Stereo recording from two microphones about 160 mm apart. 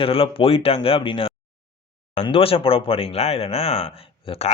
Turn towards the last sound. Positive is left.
turn(degrees=40)  # may be behind; listen again after turning